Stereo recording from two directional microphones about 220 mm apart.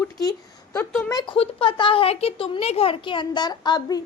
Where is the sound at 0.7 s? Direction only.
10° left (ahead or behind).